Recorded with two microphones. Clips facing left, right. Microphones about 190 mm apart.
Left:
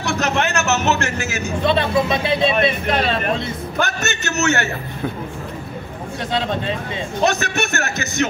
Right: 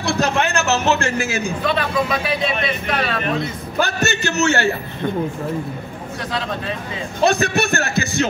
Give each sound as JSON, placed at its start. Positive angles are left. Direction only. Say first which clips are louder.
{"t": 0.0, "sound": "a man's voice", "louder": "right 1 dB", "side_deg": -30}
{"t": 1.6, "sound": "a man's voice", "louder": "left 5 dB", "side_deg": 25}
{"t": 4.2, "sound": "speech", "louder": "even", "side_deg": -30}
{"t": 6.3, "sound": "a man's voice", "louder": "left 4 dB", "side_deg": 25}
{"t": 7.2, "sound": "speech", "louder": "right 4 dB", "side_deg": -30}